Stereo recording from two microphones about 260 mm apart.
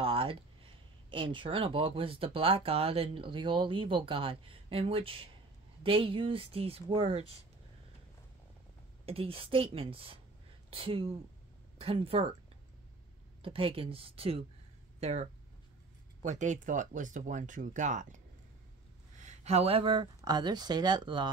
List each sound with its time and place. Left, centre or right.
0.0 s a sound: right
1.1 s speech: centre
9.0 s speech: right
13.4 s speech: right